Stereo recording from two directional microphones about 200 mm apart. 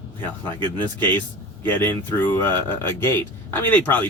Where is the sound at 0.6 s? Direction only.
10° left (ahead or behind).